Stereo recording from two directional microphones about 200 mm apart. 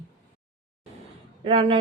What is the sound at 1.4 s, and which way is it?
Speech, 30° right (ahead or behind).